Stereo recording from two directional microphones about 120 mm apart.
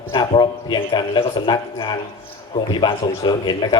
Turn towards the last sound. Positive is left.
turn(degrees=40)  # may be behind; listen again after turning